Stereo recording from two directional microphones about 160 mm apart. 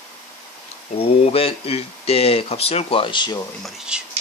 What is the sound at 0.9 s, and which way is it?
Speech, 35° left (ahead or behind).